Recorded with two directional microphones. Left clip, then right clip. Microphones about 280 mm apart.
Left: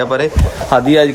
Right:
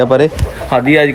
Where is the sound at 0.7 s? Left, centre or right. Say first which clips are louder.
Even; centre.